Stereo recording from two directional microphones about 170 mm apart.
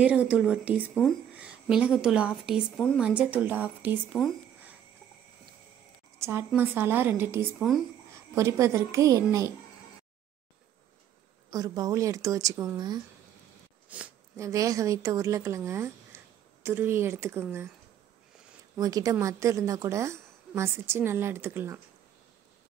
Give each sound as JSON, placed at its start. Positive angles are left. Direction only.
{"t": 0.0, "sound": "a woman's voice", "side_deg": -10}
{"t": 6.1, "sound": "a woman's voice", "side_deg": -15}
{"t": 7.5, "sound": "speech", "side_deg": 0}
{"t": 8.4, "sound": "a woman's voice", "side_deg": -20}
{"t": 11.5, "sound": "a woman's voice", "side_deg": -20}
{"t": 13.8, "sound": "a woman's voice", "side_deg": -10}
{"t": 18.8, "sound": "a woman's voice", "side_deg": -20}